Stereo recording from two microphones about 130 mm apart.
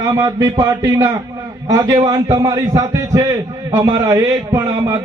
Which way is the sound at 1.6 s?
25° right (ahead or behind).